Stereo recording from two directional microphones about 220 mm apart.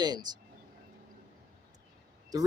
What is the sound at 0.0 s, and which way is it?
Speech, 20° right (ahead or behind).